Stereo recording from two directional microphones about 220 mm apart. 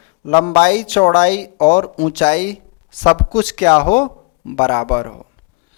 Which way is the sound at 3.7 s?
25° left (ahead or behind).